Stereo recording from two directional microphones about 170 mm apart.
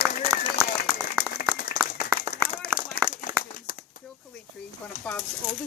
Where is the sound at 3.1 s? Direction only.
60° left (ahead or behind).